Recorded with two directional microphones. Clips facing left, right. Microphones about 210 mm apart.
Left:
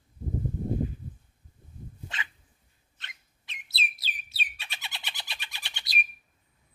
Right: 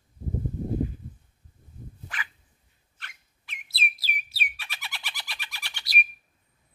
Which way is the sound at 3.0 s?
20° left (ahead or behind).